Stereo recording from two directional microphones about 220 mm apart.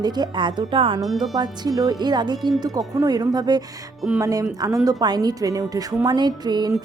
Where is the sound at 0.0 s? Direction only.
20° right (ahead or behind).